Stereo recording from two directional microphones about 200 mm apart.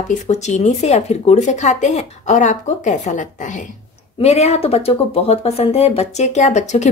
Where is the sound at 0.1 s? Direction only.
35° left (ahead or behind).